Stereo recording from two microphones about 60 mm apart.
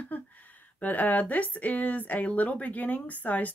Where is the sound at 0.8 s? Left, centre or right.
Left.